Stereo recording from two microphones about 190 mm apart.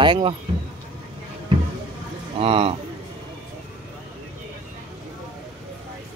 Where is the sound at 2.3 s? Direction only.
30° right (ahead or behind).